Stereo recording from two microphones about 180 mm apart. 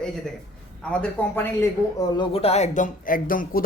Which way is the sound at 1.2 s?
10° left (ahead or behind).